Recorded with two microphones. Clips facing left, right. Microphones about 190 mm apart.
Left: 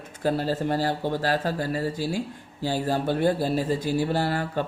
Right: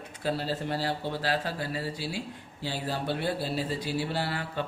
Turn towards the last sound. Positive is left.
turn(degrees=45)  # may be behind; listen again after turning